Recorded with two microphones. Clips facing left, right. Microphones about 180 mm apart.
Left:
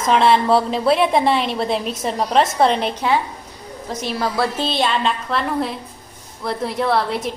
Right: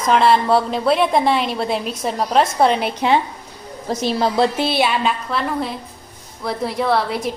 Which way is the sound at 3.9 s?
30° right (ahead or behind).